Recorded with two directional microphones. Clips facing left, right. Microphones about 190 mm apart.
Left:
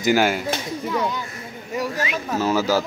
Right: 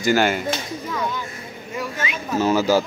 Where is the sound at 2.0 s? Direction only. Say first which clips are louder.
Right 2 dB; 5° left (ahead or behind).